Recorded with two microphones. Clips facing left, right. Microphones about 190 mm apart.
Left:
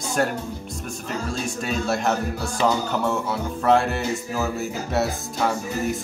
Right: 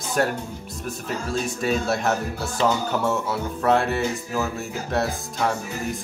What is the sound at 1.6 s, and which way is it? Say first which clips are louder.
Speech: right 1 dB; centre (ahead or behind).